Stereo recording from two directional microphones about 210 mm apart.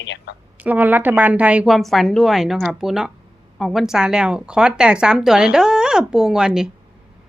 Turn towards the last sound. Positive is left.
turn(degrees=-5)  # may be behind; listen again after turning